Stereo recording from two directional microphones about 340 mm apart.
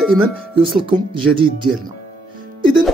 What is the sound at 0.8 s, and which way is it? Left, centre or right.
Speech, centre.